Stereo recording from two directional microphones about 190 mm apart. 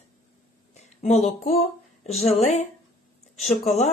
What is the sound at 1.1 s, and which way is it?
A woman's voice, 35° left (ahead or behind).